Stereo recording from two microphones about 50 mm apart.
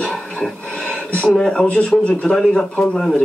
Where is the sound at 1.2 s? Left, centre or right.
Centre.